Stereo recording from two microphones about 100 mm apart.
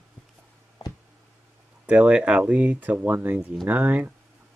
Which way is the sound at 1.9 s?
10° right (ahead or behind).